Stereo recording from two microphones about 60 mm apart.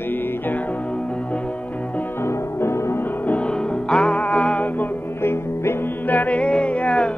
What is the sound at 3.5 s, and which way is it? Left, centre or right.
Music, centre.